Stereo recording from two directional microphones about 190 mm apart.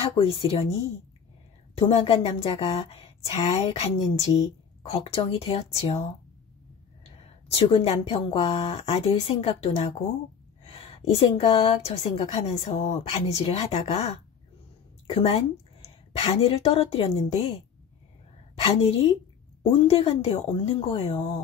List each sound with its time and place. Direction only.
0.0 s a woman's voice: 30° left (ahead or behind)
1.8 s a woman's voice: 30° left (ahead or behind)
7.2 s a woman's voice: 30° left (ahead or behind)
10.6 s a sound: 30° left (ahead or behind)
11.9 s a woman's voice: 35° left (ahead or behind)
18.6 s a woman's voice: 30° left (ahead or behind)